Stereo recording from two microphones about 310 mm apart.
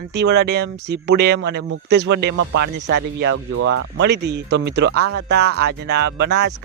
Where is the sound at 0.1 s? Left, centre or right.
Right.